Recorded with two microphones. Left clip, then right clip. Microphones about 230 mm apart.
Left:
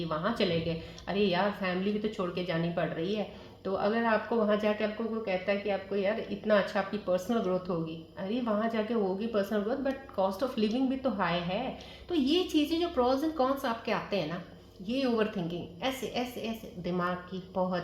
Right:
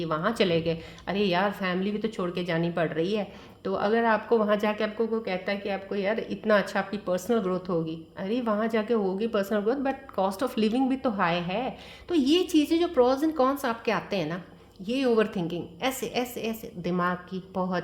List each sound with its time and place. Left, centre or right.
0.0 s a woman's voice: right